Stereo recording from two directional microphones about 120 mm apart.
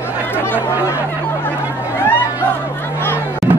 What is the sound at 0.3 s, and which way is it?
Chatter, 20° left (ahead or behind).